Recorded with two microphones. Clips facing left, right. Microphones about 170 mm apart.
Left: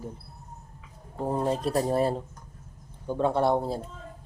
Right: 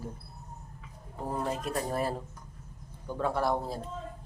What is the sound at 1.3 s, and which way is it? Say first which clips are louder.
A man's voice: left 6 dB; 30° left (ahead or behind).